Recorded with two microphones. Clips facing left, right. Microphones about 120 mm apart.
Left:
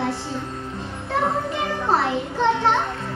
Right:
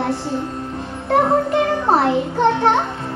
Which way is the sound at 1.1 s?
55° right (ahead or behind).